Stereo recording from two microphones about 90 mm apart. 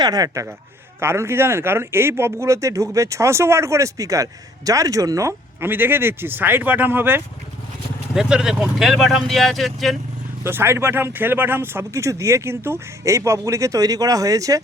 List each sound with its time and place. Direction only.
0.0 s speech: 45° right (ahead or behind)
0.9 s speech: 30° right (ahead or behind)
5.5 s speech: 25° right (ahead or behind)
8.1 s speech: 5° right (ahead or behind)
10.4 s speech: 25° right (ahead or behind)